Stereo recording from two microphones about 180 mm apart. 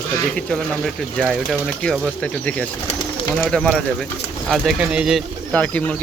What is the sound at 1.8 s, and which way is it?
Speech, 5° left (ahead or behind).